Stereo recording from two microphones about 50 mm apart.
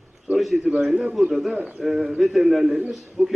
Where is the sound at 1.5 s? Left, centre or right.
Right.